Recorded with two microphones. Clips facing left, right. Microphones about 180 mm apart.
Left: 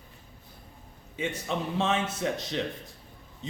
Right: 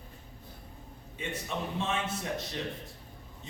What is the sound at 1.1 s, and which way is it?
Speech, 90° left.